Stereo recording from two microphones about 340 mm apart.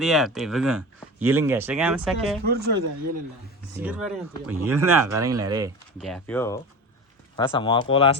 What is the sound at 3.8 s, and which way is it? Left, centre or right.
Speech, centre.